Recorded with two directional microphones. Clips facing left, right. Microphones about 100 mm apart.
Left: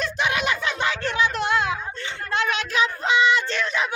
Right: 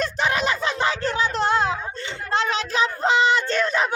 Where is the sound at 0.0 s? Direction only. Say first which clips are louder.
Right 2 dB; 40° right (ahead or behind).